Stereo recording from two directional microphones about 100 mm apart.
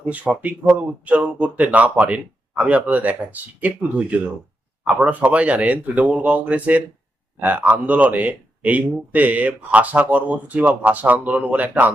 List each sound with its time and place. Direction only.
0.1 s speech: 15° right (ahead or behind)